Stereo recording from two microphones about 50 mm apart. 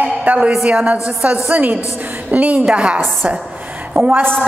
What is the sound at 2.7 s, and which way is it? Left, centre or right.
Speech, centre.